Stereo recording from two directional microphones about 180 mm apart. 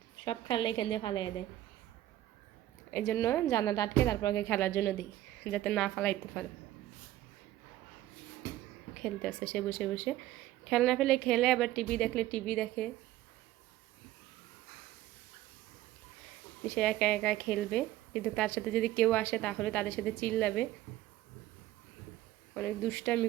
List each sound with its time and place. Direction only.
0.3 s a woman's voice: 25° left (ahead or behind)
2.9 s a woman's voice: 10° left (ahead or behind)
5.4 s a woman's voice: 5° left (ahead or behind)
9.0 s a woman's voice: 5° left (ahead or behind)
16.6 s a woman's voice: 5° left (ahead or behind)
22.5 s a woman's voice: 10° left (ahead or behind)